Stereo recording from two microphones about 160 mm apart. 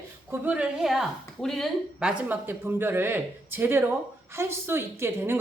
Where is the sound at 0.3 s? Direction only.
10° right (ahead or behind).